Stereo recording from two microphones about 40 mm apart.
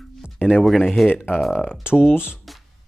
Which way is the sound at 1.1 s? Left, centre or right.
Left.